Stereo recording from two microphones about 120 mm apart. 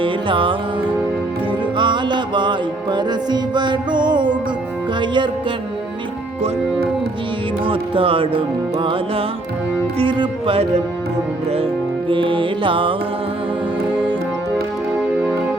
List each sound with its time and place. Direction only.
0.0 s music: 45° right (ahead or behind)
1.7 s music: 40° right (ahead or behind)
7.6 s music: 50° right (ahead or behind)